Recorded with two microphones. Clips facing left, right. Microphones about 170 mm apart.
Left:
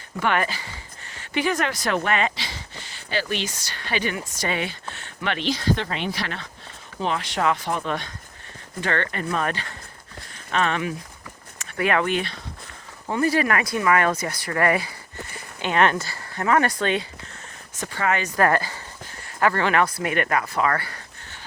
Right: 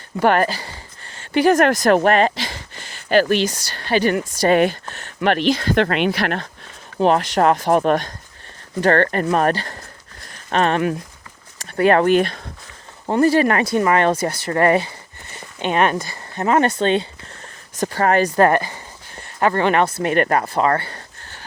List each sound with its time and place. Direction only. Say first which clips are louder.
0.2 s speech: right 7 dB; 40° right (ahead or behind)
3.4 s speech: right 9 dB; 35° right (ahead or behind)
4.4 s speech: right 12 dB; 50° right (ahead or behind)
7.0 s speech: right 8 dB; 45° right (ahead or behind)
8.8 s speech: right 10 dB; 40° right (ahead or behind)
9.5 s speech: right 8 dB; 35° right (ahead or behind)
13.2 s speech: right 6 dB; 30° right (ahead or behind)
17.7 s speech: right 8 dB; 40° right (ahead or behind)